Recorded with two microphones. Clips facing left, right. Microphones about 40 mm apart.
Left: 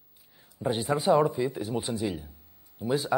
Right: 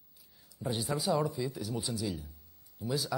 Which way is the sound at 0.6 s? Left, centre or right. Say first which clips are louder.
Left 6 dB; left.